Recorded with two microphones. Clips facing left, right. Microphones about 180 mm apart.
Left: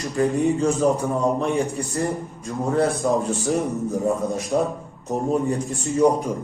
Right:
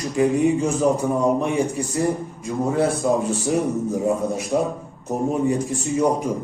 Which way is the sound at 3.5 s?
15° right (ahead or behind).